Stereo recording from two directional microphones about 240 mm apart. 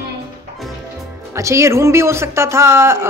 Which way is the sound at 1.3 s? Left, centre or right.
Centre.